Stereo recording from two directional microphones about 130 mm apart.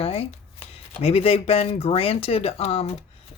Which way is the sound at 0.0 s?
50° left (ahead or behind).